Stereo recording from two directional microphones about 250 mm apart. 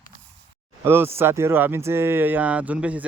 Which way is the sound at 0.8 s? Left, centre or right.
Centre.